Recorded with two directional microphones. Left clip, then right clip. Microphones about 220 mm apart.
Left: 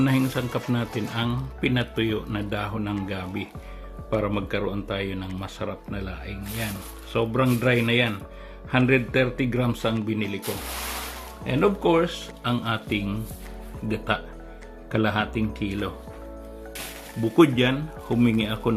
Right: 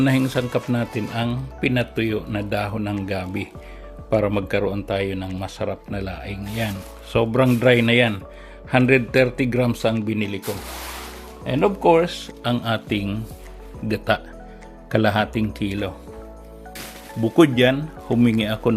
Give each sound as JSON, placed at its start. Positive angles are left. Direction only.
{"t": 0.0, "sound": "speech", "side_deg": -30}
{"t": 11.4, "sound": "speech", "side_deg": -30}
{"t": 17.3, "sound": "speech", "side_deg": -30}